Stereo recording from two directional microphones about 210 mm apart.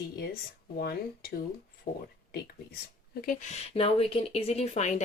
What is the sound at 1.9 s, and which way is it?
Speech, 40° left (ahead or behind).